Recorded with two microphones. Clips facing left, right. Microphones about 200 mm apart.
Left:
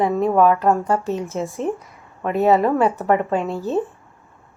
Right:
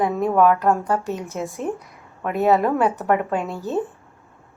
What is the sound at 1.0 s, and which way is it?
Speech, 15° right (ahead or behind).